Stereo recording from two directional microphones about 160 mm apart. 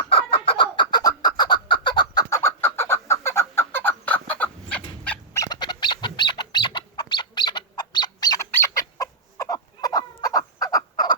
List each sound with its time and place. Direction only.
0.1 s chicken: 35° left (ahead or behind); by 5.4 s 10° left (ahead or behind)
5.4 s bird: 25° left (ahead or behind)